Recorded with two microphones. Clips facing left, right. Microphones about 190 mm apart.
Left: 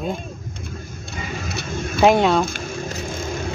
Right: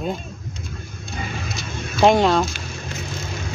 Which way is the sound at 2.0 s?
Centre (ahead or behind).